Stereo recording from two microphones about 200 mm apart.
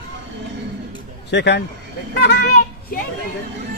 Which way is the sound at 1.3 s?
60° left (ahead or behind).